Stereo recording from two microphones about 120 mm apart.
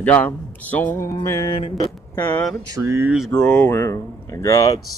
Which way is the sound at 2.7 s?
25° right (ahead or behind).